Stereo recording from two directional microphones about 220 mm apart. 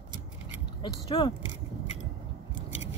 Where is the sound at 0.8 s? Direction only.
20° left (ahead or behind).